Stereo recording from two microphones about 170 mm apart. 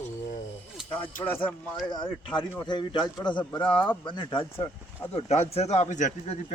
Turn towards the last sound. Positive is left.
turn(degrees=45)  # may be behind; listen again after turning